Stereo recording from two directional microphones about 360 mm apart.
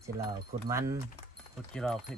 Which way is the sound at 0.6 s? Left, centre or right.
Centre.